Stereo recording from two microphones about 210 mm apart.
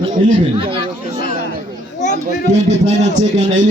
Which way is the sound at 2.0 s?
35° left (ahead or behind).